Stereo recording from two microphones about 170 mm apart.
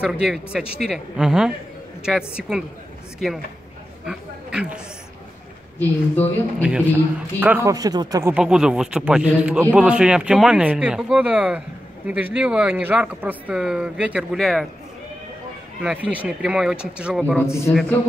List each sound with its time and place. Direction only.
0.0 s a man's voice: 5° right (ahead or behind)
4.0 s a sound: 5° right (ahead or behind)
5.8 s a woman's voice: 10° left (ahead or behind)
6.6 s a man's voice: 10° right (ahead or behind)
8.4 s a man's voice: 5° right (ahead or behind)
15.8 s a man's voice: 10° right (ahead or behind)
17.5 s a woman's voice: 15° left (ahead or behind)